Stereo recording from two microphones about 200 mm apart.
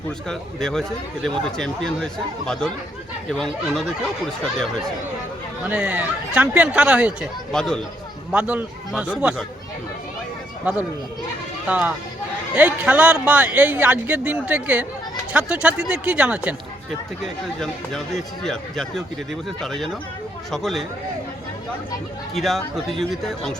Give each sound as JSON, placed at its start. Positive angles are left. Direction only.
{"t": 0.3, "sound": "speech", "side_deg": 5}
{"t": 5.6, "sound": "speech", "side_deg": -10}
{"t": 11.7, "sound": "speech", "side_deg": -10}
{"t": 17.6, "sound": "speech", "side_deg": 0}
{"t": 22.4, "sound": "speech", "side_deg": 0}